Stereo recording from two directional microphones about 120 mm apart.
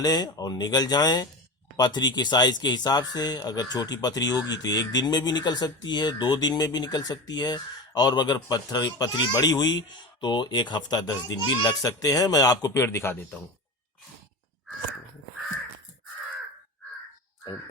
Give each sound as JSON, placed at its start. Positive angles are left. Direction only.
{"t": 0.0, "sound": "speech", "side_deg": 30}